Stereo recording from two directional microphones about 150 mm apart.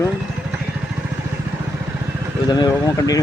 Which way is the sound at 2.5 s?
25° left (ahead or behind).